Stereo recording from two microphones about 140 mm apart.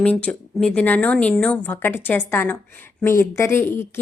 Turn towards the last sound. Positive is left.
turn(degrees=15)  # may be behind; listen again after turning